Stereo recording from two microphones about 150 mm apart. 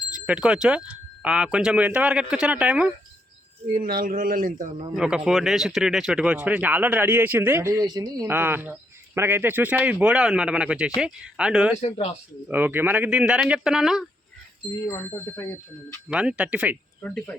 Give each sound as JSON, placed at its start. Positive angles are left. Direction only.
{"t": 0.3, "sound": "speech", "side_deg": -5}
{"t": 3.7, "sound": "speech", "side_deg": -80}
{"t": 4.9, "sound": "speech", "side_deg": -5}
{"t": 11.8, "sound": "speech", "side_deg": 45}
{"t": 12.5, "sound": "speech", "side_deg": -10}
{"t": 14.7, "sound": "speech", "side_deg": 20}
{"t": 16.0, "sound": "speech", "side_deg": -5}
{"t": 17.0, "sound": "speech", "side_deg": 10}